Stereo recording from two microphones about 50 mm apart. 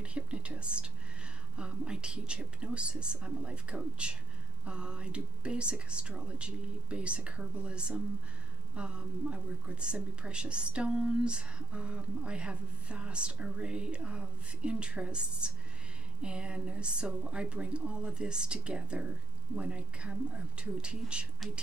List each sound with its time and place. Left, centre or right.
0.0 s whispering: right
1.6 s speech: right